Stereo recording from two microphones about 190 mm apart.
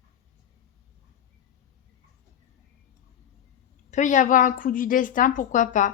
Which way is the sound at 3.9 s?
40° left (ahead or behind).